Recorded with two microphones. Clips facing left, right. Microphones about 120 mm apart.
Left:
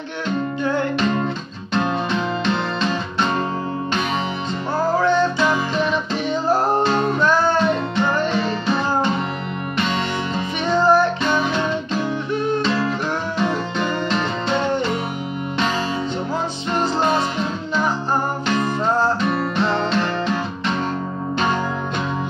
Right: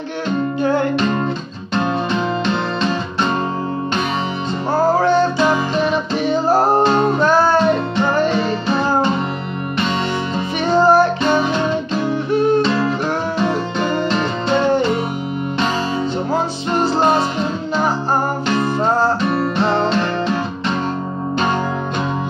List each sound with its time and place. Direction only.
4.7 s music: 35° right (ahead or behind)
5.5 s music: 5° right (ahead or behind)
6.5 s music: 35° right (ahead or behind)
10.8 s music: 5° right (ahead or behind)
11.2 s music: 30° right (ahead or behind)
12.3 s music: 5° right (ahead or behind)
18.6 s music: 35° right (ahead or behind)